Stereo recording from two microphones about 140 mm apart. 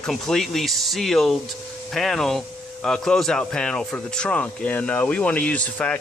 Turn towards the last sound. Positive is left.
turn(degrees=10)  # may be behind; listen again after turning